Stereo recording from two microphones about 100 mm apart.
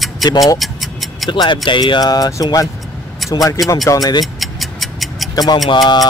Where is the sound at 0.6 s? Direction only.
Centre (ahead or behind).